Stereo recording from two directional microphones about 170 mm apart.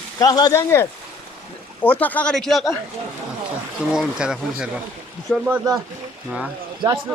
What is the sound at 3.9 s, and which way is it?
Speech, 5° right (ahead or behind).